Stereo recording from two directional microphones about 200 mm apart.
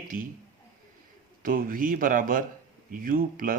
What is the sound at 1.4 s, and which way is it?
A man's voice, 45° right (ahead or behind).